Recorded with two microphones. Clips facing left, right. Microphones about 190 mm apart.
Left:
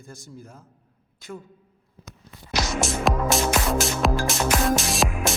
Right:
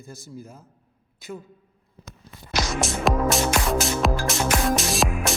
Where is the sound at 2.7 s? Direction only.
Centre (ahead or behind).